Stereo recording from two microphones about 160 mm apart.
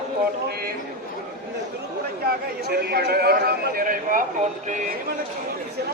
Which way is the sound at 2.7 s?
80° right.